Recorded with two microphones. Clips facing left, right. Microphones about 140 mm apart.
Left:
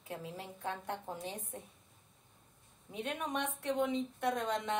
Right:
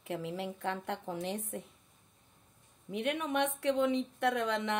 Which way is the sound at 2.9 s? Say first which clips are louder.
Right 5 dB; 70° right (ahead or behind).